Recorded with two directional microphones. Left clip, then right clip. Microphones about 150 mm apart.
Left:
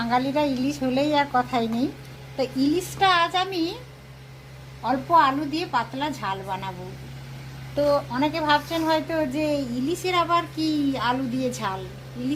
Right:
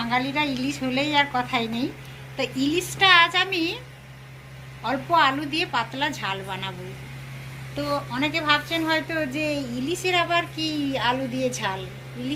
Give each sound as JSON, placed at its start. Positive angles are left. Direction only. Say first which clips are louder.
{"t": 0.0, "sound": "a woman's voice", "louder": "left 1 dB", "side_deg": 90}
{"t": 2.3, "sound": "a woman's voice", "louder": "left 1 dB", "side_deg": 75}
{"t": 4.9, "sound": "a woman's voice", "louder": "left 1 dB", "side_deg": 70}
{"t": 8.1, "sound": "a woman's voice", "louder": "left 1 dB", "side_deg": 85}